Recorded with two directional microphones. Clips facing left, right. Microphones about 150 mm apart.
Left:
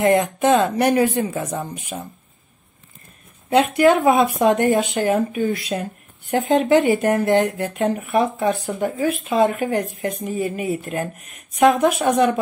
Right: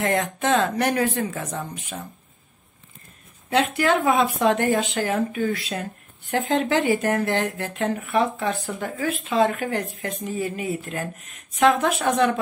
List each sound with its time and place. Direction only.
0.0 s speech: 15° left (ahead or behind)
3.4 s speech: 15° left (ahead or behind)